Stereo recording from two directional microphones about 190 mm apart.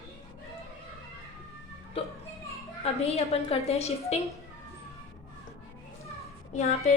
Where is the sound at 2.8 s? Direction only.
35° left (ahead or behind).